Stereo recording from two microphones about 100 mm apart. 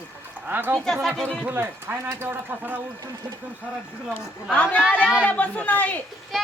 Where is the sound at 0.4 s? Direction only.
20° right (ahead or behind).